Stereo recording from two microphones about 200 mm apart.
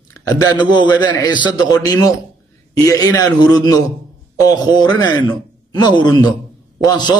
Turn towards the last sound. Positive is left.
turn(degrees=20)  # may be behind; listen again after turning